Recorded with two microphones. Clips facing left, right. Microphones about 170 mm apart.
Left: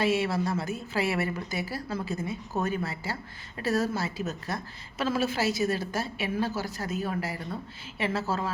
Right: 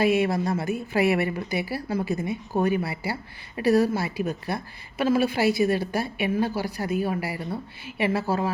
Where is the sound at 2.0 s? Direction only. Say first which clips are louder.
Right 7 dB; 65° right (ahead or behind).